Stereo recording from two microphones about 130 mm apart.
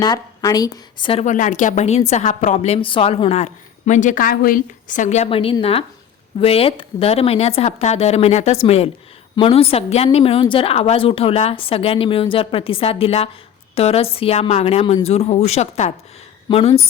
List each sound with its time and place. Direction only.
0.0 s a woman's voice: 30° left (ahead or behind)
1.2 s a woman's voice: 75° left (ahead or behind); by 16.8 s 50° left (ahead or behind)